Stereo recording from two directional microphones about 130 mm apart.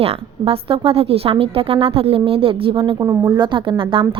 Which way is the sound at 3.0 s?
25° right (ahead or behind).